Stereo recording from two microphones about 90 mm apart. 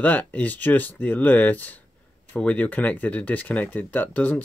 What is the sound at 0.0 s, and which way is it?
Speech, 20° left (ahead or behind).